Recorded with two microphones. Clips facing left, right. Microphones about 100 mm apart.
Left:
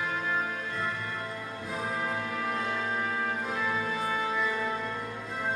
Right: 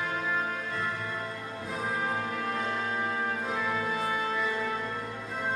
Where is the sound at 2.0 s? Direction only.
25° right (ahead or behind).